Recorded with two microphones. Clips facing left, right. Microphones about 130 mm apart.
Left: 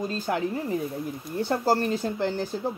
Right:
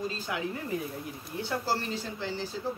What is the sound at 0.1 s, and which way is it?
Speech, 45° left (ahead or behind).